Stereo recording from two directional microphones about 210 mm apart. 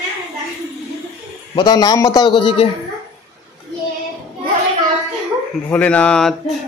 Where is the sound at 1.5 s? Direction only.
20° left (ahead or behind).